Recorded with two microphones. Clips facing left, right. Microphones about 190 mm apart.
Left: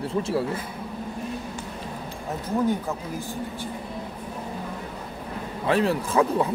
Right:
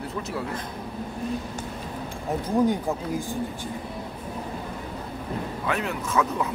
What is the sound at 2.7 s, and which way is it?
Speech, 15° right (ahead or behind).